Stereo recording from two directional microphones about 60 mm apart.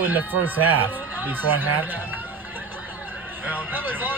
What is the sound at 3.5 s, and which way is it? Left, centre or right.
Speech, right.